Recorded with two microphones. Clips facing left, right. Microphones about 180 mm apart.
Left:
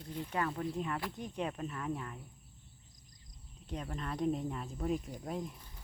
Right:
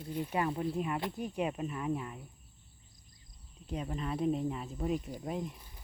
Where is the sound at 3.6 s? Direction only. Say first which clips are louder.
Right 4 dB; 5° right (ahead or behind).